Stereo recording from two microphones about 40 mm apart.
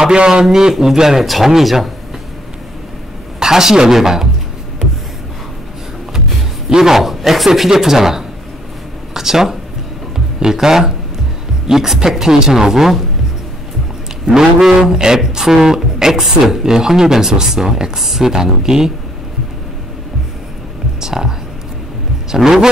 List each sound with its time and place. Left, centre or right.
0.1 s a man's voice: right
1.2 s speech: centre
3.3 s speech: centre
6.7 s a man's voice: centre
14.2 s speech: centre
21.0 s a sound: centre
22.3 s speech: centre